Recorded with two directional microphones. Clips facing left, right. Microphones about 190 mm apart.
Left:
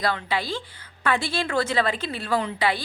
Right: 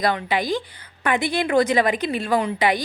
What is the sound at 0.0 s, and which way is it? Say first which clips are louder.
A woman's voice: right 4 dB; 15° right (ahead or behind).